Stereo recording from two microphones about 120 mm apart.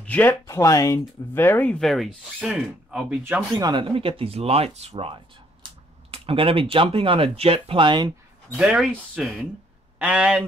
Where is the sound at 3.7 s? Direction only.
50° right (ahead or behind).